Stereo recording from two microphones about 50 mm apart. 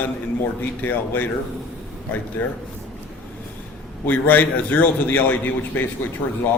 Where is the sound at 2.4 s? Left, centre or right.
Left.